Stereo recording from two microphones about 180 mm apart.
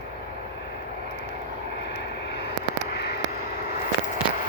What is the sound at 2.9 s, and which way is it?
Static, 65° left (ahead or behind).